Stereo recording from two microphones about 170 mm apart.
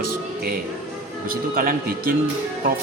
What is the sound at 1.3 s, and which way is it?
Speech, 60° right (ahead or behind).